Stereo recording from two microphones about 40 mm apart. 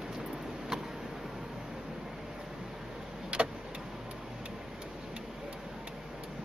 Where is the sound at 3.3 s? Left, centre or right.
Right.